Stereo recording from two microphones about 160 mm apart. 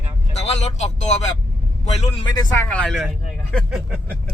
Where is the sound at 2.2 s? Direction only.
25° left (ahead or behind).